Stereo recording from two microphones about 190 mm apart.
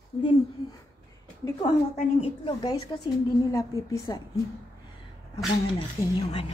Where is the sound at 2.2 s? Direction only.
25° left (ahead or behind).